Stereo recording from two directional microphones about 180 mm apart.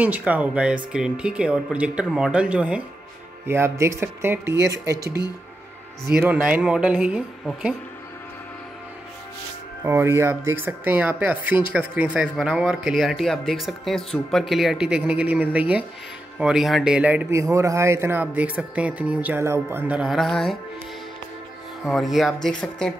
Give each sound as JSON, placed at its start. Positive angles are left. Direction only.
{"t": 0.0, "sound": "speech", "side_deg": -10}
{"t": 6.0, "sound": "speech", "side_deg": -5}
{"t": 9.8, "sound": "speech", "side_deg": -15}
{"t": 19.9, "sound": "speech", "side_deg": -5}
{"t": 21.8, "sound": "speech", "side_deg": 0}